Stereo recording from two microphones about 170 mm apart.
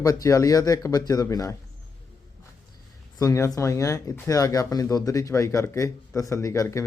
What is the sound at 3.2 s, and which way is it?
Speech, 20° left (ahead or behind).